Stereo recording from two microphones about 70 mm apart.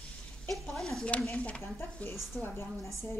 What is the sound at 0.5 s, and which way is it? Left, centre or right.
Speech, centre.